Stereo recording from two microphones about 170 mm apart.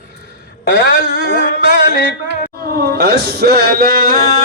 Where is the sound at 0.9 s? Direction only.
80° right.